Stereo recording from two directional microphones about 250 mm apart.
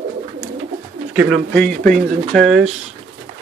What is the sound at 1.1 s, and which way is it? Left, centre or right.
Speech, centre.